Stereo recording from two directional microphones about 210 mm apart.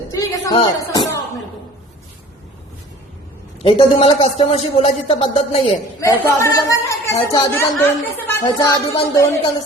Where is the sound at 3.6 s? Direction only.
25° left (ahead or behind).